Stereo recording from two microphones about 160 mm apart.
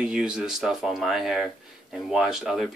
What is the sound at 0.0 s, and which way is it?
Speech, 5° right (ahead or behind).